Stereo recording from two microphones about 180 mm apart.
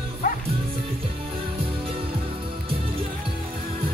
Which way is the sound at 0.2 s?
45° left (ahead or behind).